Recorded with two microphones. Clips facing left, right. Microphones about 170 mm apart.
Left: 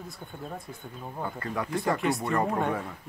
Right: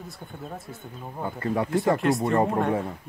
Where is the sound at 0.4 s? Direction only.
5° right (ahead or behind).